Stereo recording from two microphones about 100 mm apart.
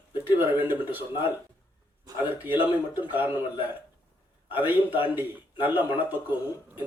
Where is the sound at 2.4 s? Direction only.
20° right (ahead or behind).